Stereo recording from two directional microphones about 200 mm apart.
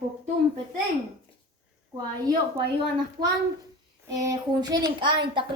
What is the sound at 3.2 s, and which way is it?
A child's voice, 20° right (ahead or behind).